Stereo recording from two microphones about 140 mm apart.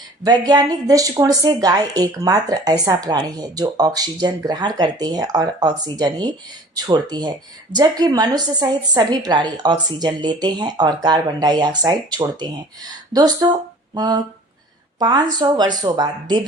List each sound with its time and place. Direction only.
0.2 s speech: 30° right (ahead or behind)